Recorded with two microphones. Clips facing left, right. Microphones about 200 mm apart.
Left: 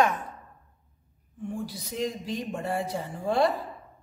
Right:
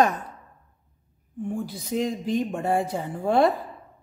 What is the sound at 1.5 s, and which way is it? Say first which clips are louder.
A woman's voice: right 6 dB; 55° right (ahead or behind).